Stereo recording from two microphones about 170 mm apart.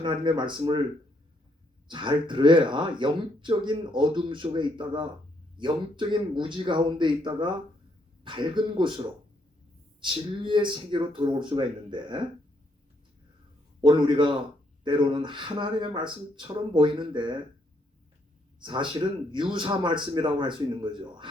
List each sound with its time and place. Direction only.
0.0 s speech: 25° right (ahead or behind)
1.9 s speech: 25° right (ahead or behind)
13.8 s speech: 30° right (ahead or behind)
18.6 s speech: 30° right (ahead or behind)